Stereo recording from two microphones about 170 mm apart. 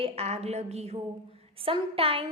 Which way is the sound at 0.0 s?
35° right (ahead or behind).